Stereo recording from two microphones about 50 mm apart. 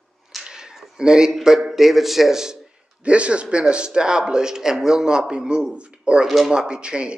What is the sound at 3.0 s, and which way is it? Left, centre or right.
A man's voice, right.